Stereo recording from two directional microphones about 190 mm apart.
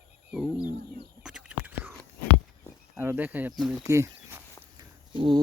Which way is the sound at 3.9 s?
15° right (ahead or behind).